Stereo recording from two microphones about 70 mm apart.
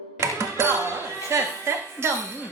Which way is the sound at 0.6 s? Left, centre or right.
Right.